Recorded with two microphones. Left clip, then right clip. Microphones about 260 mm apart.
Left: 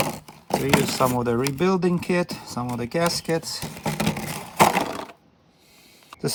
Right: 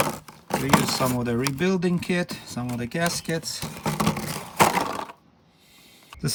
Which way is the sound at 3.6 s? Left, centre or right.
Centre.